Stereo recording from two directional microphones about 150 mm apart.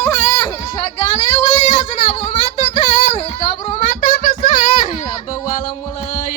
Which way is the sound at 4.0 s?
70° left (ahead or behind).